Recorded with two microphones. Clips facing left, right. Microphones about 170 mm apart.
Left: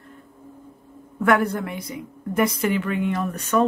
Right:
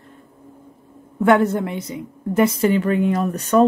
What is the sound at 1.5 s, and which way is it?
A woman's voice, 25° right (ahead or behind).